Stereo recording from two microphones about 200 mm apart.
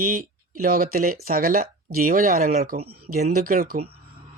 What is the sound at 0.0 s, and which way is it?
Speech, 45° right (ahead or behind).